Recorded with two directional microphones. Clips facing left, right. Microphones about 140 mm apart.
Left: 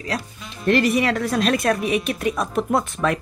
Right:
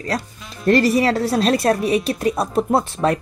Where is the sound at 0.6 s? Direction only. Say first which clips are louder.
Right 3 dB; 35° right (ahead or behind).